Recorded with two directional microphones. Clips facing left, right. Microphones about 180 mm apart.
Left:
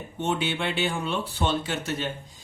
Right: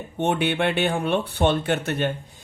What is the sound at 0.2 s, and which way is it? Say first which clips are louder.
A man's voice: right 5 dB; 60° right (ahead or behind).